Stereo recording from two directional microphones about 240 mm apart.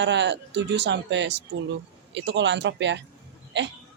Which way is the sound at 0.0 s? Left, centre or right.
Right.